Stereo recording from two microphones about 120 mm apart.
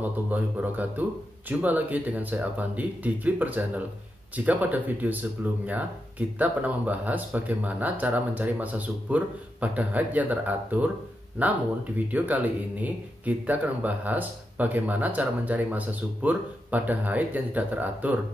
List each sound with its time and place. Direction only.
0.0 s speech: 15° right (ahead or behind)